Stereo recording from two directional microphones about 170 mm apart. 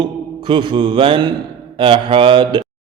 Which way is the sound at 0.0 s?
30° right (ahead or behind).